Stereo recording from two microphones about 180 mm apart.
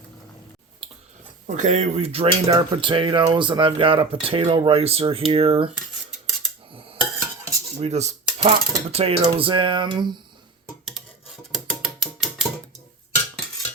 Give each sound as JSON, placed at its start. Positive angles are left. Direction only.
{"t": 1.5, "sound": "dishes", "side_deg": -45}
{"t": 2.5, "sound": "speech", "side_deg": -25}
{"t": 5.3, "sound": "dishes", "side_deg": -30}
{"t": 7.8, "sound": "dishes", "side_deg": -35}
{"t": 9.2, "sound": "speech", "side_deg": -30}
{"t": 11.5, "sound": "music", "side_deg": 0}